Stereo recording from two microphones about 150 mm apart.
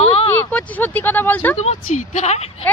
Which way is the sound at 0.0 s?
40° left (ahead or behind).